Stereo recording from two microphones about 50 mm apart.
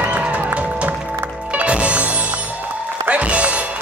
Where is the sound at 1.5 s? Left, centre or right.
Right.